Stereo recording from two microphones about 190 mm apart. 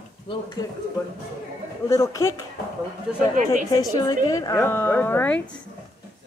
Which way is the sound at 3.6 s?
20° left (ahead or behind).